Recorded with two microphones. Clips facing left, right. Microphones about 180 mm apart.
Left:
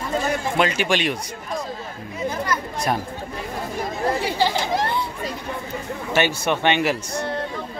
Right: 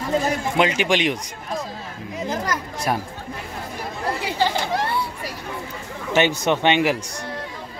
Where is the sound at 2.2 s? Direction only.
90° right.